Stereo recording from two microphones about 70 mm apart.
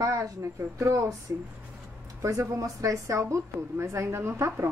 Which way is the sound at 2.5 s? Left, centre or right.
Right.